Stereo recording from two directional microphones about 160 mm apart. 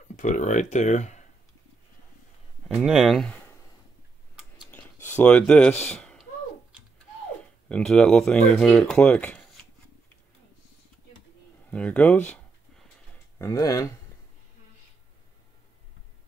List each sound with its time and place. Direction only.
0.1 s speech: 50° left (ahead or behind)
2.7 s speech: 5° right (ahead or behind)
4.6 s a sound: 10° left (ahead or behind)
7.6 s speech: 5° left (ahead or behind)
11.7 s speech: 10° left (ahead or behind)
13.4 s speech: 20° left (ahead or behind)